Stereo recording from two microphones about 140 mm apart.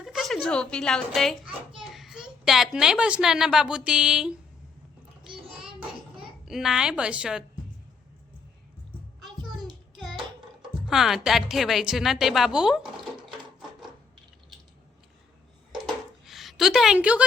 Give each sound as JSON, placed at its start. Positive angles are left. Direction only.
{"t": 0.0, "sound": "a child's voice", "side_deg": 0}
{"t": 6.4, "sound": "a woman's voice", "side_deg": 0}
{"t": 9.2, "sound": "a sound", "side_deg": -30}
{"t": 9.9, "sound": "child singing", "side_deg": 0}
{"t": 10.8, "sound": "a woman's voice", "side_deg": 0}
{"t": 15.7, "sound": "a sound", "side_deg": -5}